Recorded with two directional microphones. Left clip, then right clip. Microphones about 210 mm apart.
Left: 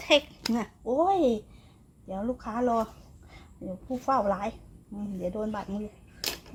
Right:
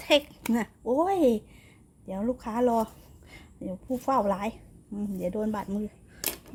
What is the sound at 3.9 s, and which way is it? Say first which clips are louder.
Speech: even; 35° right (ahead or behind).